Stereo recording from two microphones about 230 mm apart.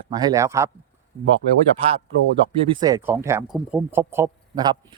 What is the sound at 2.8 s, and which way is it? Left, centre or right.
Speech, centre.